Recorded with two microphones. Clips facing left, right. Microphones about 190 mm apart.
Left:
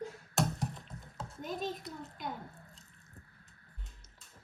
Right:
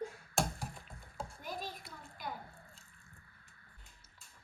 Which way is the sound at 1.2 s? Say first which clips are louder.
Left 8 dB; 20° left (ahead or behind).